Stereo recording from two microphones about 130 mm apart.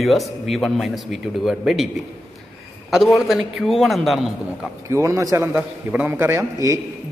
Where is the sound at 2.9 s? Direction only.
Centre (ahead or behind).